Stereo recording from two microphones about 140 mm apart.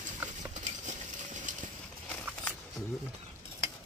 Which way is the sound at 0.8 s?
60° right (ahead or behind).